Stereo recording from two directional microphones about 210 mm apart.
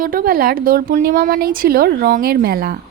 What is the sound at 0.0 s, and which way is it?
Speech, 40° right (ahead or behind).